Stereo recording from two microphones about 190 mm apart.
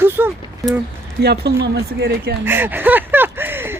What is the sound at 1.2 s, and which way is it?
Speech, 60° right (ahead or behind).